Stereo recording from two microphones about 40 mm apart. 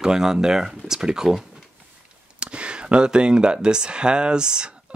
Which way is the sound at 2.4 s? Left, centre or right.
Right.